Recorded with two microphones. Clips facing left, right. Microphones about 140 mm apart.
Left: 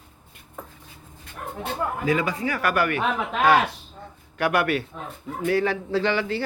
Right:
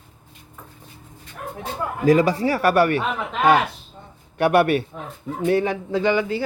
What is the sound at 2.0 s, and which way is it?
A man's voice, 40° right (ahead or behind).